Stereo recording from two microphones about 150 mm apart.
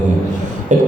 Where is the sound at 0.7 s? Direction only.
55° right (ahead or behind).